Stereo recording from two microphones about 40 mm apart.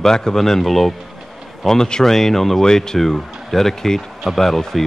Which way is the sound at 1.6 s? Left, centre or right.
Centre.